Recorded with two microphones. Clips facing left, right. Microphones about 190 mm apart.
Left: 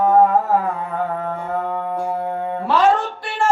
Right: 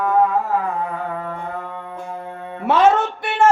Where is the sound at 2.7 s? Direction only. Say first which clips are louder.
Right 2 dB; 25° right (ahead or behind).